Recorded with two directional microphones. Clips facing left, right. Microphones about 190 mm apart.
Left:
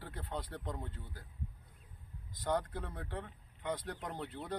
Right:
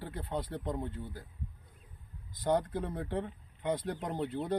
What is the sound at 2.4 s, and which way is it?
Speech, 15° right (ahead or behind).